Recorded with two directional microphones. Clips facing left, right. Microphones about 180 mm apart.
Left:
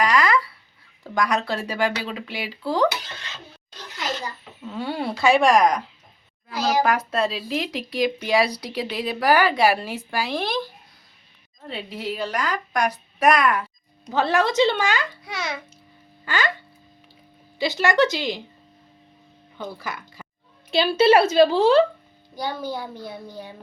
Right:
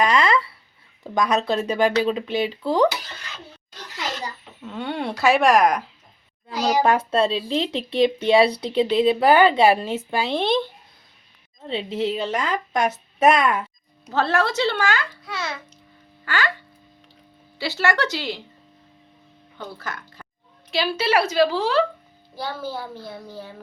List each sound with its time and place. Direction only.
0.0 s a sound: 25° right (ahead or behind)
1.0 s speech: 20° right (ahead or behind)
4.6 s speech: centre (ahead or behind)
6.8 s speech: 30° right (ahead or behind)
11.7 s speech: 25° right (ahead or behind)
14.1 s a child's voice: 15° left (ahead or behind)
17.6 s a child's voice: 15° left (ahead or behind)
19.7 s speech: 15° left (ahead or behind)
20.7 s a woman's voice: 25° left (ahead or behind)
22.4 s a child's voice: 15° left (ahead or behind)